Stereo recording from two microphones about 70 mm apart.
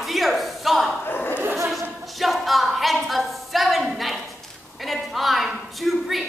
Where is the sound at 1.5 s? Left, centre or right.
Centre.